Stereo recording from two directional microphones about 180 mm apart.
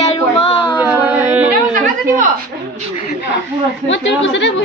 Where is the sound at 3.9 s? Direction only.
90° left.